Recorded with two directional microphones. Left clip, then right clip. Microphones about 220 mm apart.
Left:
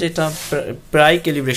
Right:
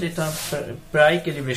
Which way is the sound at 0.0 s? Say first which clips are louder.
Left 6 dB; 40° left (ahead or behind).